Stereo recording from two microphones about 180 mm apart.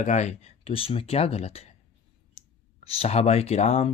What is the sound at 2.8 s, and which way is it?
Speech, 35° left (ahead or behind).